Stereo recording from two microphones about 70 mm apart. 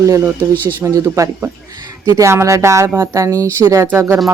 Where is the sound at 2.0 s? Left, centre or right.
Right.